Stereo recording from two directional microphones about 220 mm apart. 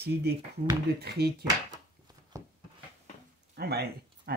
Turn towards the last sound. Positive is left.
turn(degrees=-45)  # may be behind; listen again after turning